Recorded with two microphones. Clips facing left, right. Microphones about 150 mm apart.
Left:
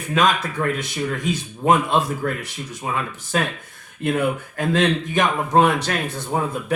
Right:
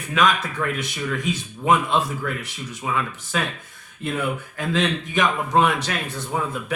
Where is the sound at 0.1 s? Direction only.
35° left (ahead or behind).